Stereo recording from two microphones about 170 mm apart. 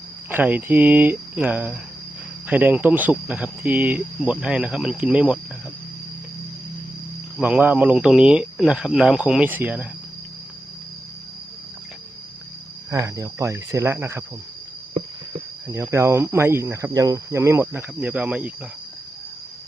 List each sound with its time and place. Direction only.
0.3 s speech: 10° right (ahead or behind)
7.3 s speech: 10° right (ahead or behind)
12.9 s speech: 20° right (ahead or behind)
15.7 s speech: 15° right (ahead or behind)